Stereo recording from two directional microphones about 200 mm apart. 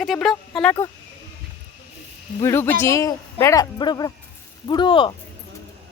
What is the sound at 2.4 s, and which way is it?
Speech, 10° left (ahead or behind).